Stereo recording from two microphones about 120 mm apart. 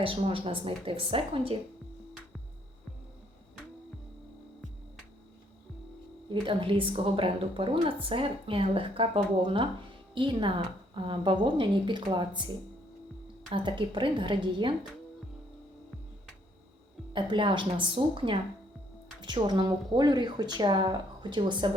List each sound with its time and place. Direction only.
0.0 s speech: 50° right (ahead or behind)
6.2 s speech: 45° right (ahead or behind)
13.5 s speech: 45° right (ahead or behind)
17.1 s speech: 40° right (ahead or behind)